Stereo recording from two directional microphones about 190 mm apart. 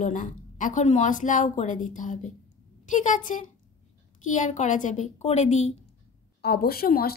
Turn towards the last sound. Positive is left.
turn(degrees=55)  # may be behind; listen again after turning